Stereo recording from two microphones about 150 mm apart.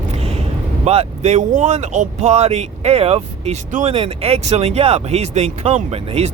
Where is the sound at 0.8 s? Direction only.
45° right (ahead or behind).